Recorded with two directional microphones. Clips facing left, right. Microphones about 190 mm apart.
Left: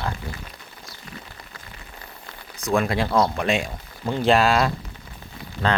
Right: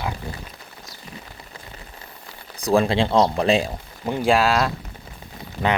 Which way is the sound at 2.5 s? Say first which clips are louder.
Right 4 dB; 35° right (ahead or behind).